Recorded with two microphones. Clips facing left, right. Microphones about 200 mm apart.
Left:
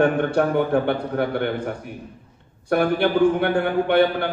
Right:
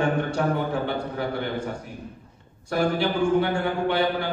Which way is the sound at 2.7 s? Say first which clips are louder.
Left 4 dB; 60° left (ahead or behind).